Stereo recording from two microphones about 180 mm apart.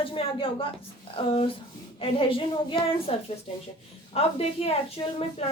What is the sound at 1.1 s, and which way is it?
A woman's voice, 30° left (ahead or behind).